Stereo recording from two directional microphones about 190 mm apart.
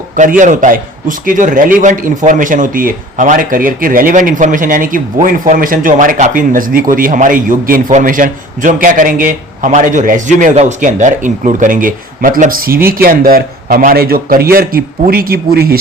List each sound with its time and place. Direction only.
0.2 s a man's voice: 40° right (ahead or behind)